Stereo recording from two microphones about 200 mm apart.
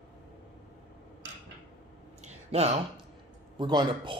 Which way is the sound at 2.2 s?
30° right (ahead or behind).